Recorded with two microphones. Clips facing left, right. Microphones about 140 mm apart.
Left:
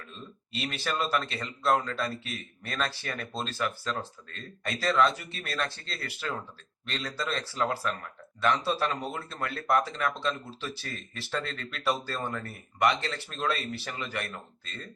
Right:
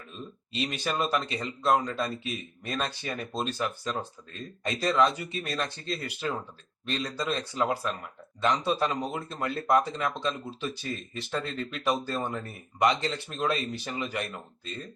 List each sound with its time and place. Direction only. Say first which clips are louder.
0.5 s speech: right 2 dB; 15° right (ahead or behind)